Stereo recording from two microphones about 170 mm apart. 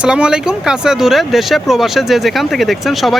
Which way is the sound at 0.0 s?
5° right (ahead or behind).